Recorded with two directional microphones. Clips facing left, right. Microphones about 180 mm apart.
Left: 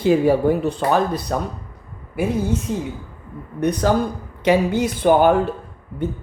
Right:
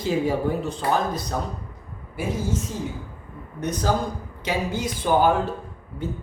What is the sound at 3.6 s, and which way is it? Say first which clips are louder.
Speech: left 6 dB; 60° left (ahead or behind).